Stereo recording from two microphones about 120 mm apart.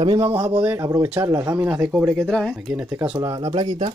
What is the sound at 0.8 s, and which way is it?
Speech, 25° right (ahead or behind).